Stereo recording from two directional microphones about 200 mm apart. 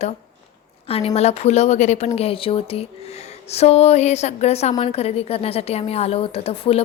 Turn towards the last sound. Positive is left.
turn(degrees=30)  # may be behind; listen again after turning